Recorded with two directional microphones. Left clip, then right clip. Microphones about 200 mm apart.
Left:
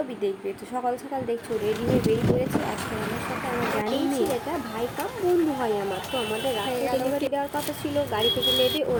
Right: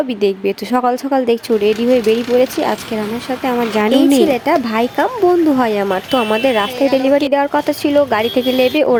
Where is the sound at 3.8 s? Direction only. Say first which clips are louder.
Right 14 dB; 55° right (ahead or behind).